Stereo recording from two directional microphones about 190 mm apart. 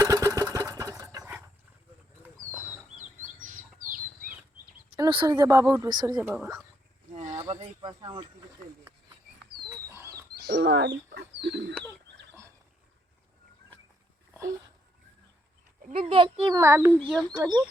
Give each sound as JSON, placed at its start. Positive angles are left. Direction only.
{"t": 0.0, "sound": "a sound", "side_deg": -20}
{"t": 3.4, "sound": "chicken", "side_deg": -45}
{"t": 4.9, "sound": "speech", "side_deg": -25}
{"t": 6.1, "sound": "speech", "side_deg": -10}
{"t": 7.1, "sound": "a sound", "side_deg": -40}
{"t": 7.5, "sound": "speech", "side_deg": -25}
{"t": 9.6, "sound": "a sound", "side_deg": -15}
{"t": 10.4, "sound": "speech", "side_deg": -60}
{"t": 15.9, "sound": "speech", "side_deg": -30}
{"t": 16.6, "sound": "speech", "side_deg": -15}